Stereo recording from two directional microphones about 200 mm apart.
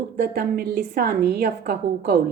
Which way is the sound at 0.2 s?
50° right (ahead or behind).